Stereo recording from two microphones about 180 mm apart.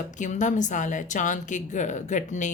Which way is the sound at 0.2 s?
45° left (ahead or behind).